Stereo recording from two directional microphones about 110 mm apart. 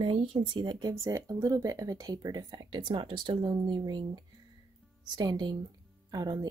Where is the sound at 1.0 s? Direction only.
30° right (ahead or behind).